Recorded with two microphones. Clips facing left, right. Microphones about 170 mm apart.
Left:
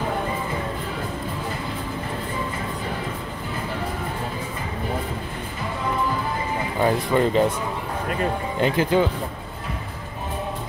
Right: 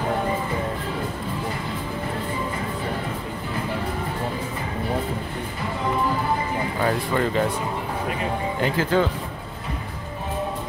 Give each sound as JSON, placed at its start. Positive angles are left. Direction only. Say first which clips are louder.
{"t": 6.8, "sound": "speech", "louder": "left 4 dB", "side_deg": 20}
{"t": 8.5, "sound": "speech", "louder": "left 2 dB", "side_deg": 20}